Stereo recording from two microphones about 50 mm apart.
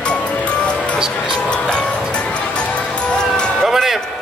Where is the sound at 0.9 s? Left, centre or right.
Centre.